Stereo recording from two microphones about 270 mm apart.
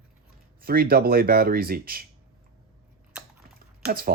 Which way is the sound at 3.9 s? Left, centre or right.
Right.